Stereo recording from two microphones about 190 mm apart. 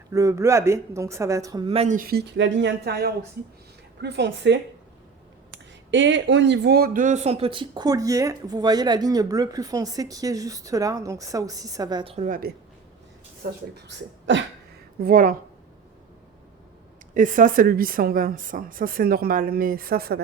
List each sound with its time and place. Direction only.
0.1 s a woman's voice: 15° right (ahead or behind); by 2.0 s 30° right (ahead or behind)
2.0 s speech: 55° right (ahead or behind)
5.9 s speech: 75° right (ahead or behind); by 12.1 s 20° right (ahead or behind)
12.1 s a woman's voice: 40° right (ahead or behind)
13.7 s speech: 70° right (ahead or behind)
15.0 s a woman's voice: 50° right (ahead or behind)
17.2 s a woman's voice: 45° right (ahead or behind)